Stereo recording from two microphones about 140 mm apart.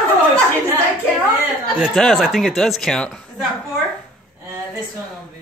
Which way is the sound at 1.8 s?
Centre (ahead or behind).